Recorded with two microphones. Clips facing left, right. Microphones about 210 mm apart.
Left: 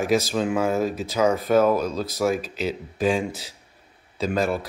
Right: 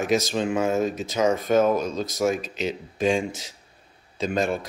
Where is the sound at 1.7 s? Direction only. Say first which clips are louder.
Left 1 dB; 30° left (ahead or behind).